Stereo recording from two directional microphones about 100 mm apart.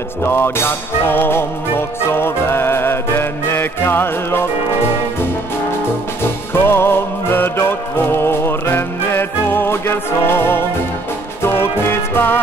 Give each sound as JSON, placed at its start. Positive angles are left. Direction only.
{"t": 0.2, "sound": "music", "side_deg": 25}
{"t": 6.5, "sound": "music", "side_deg": 25}